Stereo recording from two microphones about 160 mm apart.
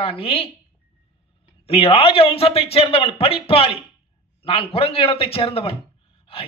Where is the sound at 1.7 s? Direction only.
40° left (ahead or behind).